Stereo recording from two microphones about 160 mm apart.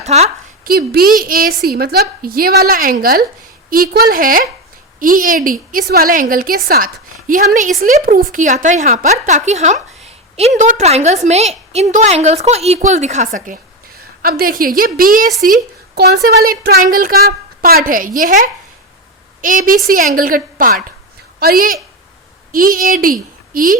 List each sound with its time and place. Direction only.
0.0 s a woman's voice: 45° right (ahead or behind)
0.6 s a woman's voice: 70° right (ahead or behind); by 13.6 s 55° right (ahead or behind)
14.2 s a woman's voice: 65° right (ahead or behind)
16.0 s a woman's voice: 80° right; by 18.3 s 55° right (ahead or behind)
19.4 s a woman's voice: 55° right (ahead or behind)